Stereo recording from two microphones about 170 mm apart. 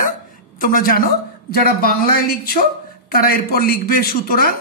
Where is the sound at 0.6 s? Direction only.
55° left (ahead or behind).